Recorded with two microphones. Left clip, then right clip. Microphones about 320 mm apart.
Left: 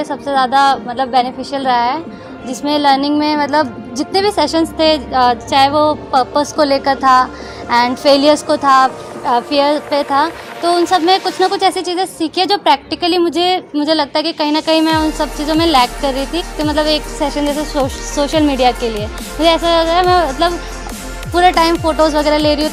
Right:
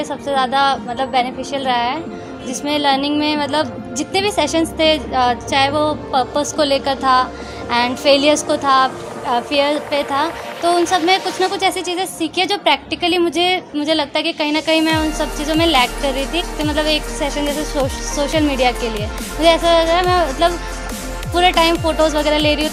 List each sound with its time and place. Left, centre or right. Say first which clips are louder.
0.0 s a woman's voice: left 3 dB; left